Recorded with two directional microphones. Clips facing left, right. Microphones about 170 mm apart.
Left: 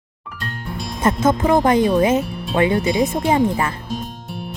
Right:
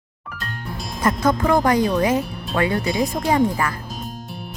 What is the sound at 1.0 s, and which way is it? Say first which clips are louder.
Speech: left 2 dB; 25° left (ahead or behind).